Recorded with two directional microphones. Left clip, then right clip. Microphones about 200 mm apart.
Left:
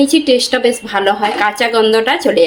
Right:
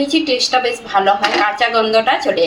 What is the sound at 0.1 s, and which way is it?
A woman's voice, 55° left (ahead or behind).